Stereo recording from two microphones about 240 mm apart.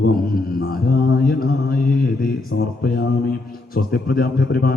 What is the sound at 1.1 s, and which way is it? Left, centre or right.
Speech, left.